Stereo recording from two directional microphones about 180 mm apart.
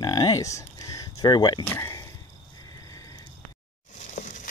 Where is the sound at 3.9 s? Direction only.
40° left (ahead or behind).